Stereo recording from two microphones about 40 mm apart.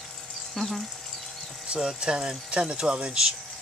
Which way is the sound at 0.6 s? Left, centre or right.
Centre.